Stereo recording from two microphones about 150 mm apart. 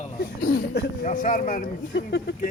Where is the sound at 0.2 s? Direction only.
90° left.